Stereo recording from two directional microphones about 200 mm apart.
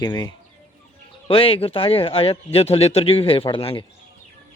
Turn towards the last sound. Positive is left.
turn(degrees=25)  # may be behind; listen again after turning